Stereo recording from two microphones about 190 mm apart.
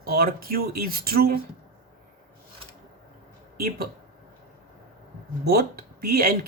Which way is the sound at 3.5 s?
55° right (ahead or behind).